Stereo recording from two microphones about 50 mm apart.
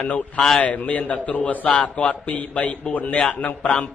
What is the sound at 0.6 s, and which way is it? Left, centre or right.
A man's voice, left.